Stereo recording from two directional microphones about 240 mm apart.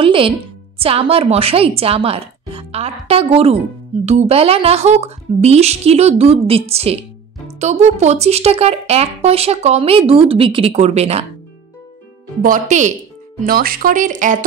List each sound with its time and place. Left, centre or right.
0.0 s speech: right
12.4 s speech: right